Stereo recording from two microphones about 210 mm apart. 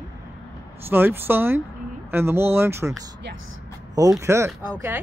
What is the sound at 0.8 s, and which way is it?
Speech, 10° right (ahead or behind).